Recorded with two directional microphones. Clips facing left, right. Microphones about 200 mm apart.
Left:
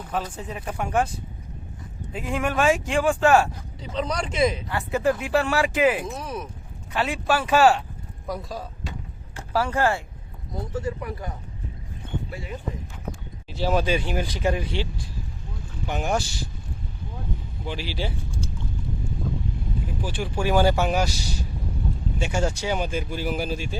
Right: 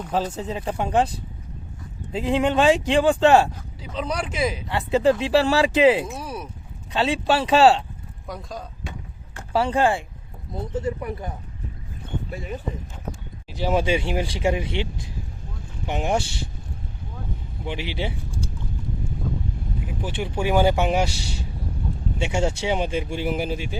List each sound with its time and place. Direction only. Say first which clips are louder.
0.3 s speech: right 4 dB; 25° right (ahead or behind)
2.1 s speech: right 5 dB; 25° right (ahead or behind)
3.8 s speech: even; 5° right (ahead or behind)
4.7 s speech: right 4 dB; 25° right (ahead or behind)
6.1 s speech: left 1 dB; 10° right (ahead or behind)
6.9 s speech: right 3 dB; 25° right (ahead or behind)
8.3 s speech: left 3 dB; centre (ahead or behind)
9.5 s speech: right 3 dB; 20° right (ahead or behind)
13.6 s speech: right 1 dB; 20° right (ahead or behind)
17.7 s speech: right 2 dB; 20° right (ahead or behind)
20.0 s speech: right 2 dB; 20° right (ahead or behind)